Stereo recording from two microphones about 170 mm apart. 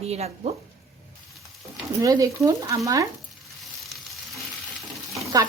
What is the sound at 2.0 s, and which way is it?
Frying, 20° right (ahead or behind).